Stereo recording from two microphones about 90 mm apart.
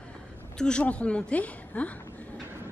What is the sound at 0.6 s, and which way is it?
A woman's voice, 10° left (ahead or behind).